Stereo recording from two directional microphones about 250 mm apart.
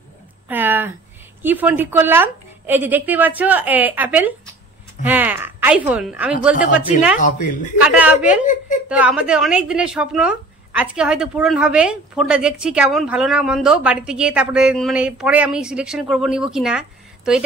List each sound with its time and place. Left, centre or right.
0.5 s a sound: centre
1.4 s speech: centre
7.2 s speech: left
7.8 s a woman's voice: centre